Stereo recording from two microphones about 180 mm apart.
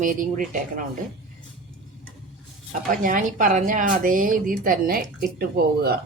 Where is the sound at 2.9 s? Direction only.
50° right (ahead or behind).